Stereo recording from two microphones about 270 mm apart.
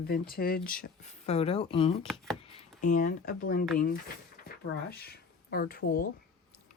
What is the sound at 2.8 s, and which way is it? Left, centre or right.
Speech, left.